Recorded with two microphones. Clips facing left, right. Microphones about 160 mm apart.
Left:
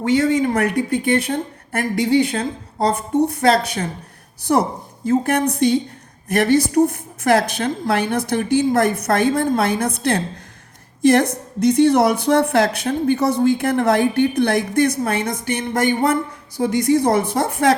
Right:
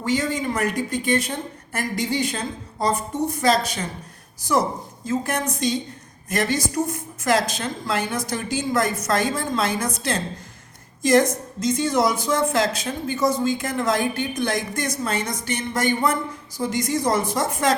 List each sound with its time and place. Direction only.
0.0 s a woman's voice: 60° left (ahead or behind)